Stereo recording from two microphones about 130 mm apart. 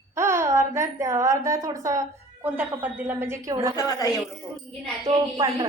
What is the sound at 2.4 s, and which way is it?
A woman's voice, 15° right (ahead or behind).